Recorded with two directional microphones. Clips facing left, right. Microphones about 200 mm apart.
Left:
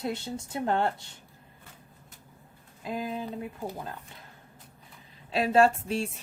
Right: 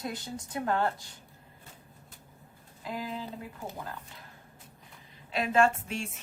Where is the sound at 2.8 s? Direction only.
20° left (ahead or behind).